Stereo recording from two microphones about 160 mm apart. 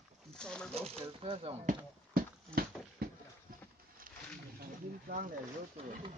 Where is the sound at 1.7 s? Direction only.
70° right (ahead or behind).